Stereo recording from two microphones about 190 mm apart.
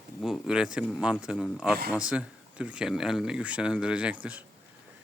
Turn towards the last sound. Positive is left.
turn(degrees=-5)  # may be behind; listen again after turning